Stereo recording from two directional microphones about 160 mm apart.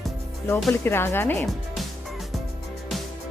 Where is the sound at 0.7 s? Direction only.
15° left (ahead or behind).